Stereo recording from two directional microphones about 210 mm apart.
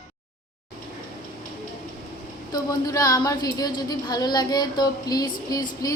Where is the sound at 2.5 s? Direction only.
15° left (ahead or behind).